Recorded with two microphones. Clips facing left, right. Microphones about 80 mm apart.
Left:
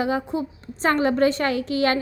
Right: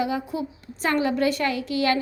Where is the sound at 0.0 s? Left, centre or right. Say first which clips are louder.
Left 2 dB; left.